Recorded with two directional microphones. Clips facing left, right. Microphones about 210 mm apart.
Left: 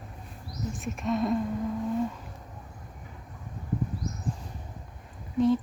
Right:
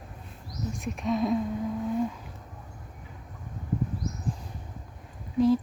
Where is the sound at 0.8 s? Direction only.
Centre (ahead or behind).